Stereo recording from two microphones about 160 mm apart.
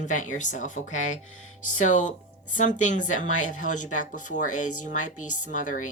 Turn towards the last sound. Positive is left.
turn(degrees=55)  # may be behind; listen again after turning